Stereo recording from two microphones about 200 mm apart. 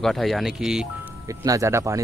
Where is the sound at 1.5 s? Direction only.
15° right (ahead or behind).